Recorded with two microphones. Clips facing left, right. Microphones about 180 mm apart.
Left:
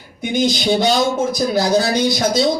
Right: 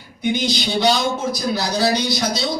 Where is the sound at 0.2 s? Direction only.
50° left (ahead or behind).